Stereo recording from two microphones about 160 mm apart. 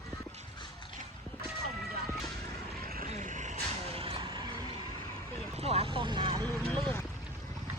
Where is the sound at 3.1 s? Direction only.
50° right (ahead or behind).